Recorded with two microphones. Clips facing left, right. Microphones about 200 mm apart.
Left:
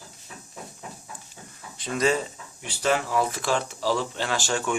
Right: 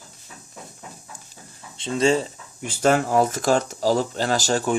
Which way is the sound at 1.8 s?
25° right (ahead or behind).